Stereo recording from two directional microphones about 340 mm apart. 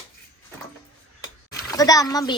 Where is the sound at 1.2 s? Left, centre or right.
Centre.